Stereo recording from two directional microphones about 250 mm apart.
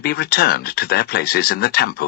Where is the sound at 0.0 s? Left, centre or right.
Left.